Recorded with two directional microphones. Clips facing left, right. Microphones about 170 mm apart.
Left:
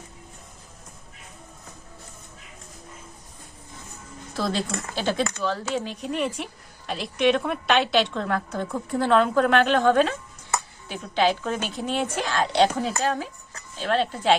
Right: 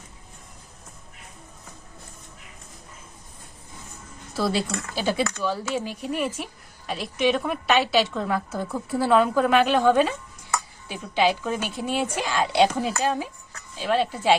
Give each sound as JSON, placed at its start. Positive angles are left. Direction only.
{"t": 4.4, "sound": "speech", "side_deg": -5}